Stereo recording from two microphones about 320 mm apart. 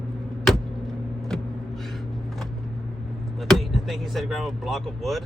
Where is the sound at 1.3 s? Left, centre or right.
Centre.